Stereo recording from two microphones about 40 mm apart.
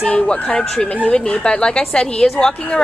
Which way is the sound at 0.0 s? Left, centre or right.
Left.